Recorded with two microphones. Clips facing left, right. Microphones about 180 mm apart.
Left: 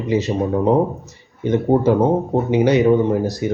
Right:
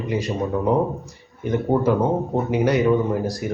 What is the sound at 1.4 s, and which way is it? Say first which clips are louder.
Speech: left 4 dB; 25° left (ahead or behind).